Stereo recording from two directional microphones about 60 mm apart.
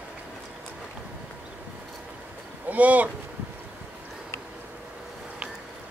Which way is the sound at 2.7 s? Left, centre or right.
Right.